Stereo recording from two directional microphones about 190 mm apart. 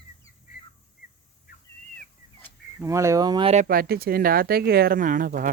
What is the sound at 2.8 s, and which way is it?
Speech, 15° right (ahead or behind).